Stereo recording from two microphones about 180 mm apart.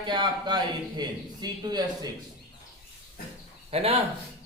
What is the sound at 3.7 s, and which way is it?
Speech, 35° right (ahead or behind).